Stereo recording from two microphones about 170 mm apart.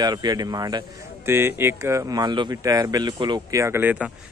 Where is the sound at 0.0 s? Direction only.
25° right (ahead or behind).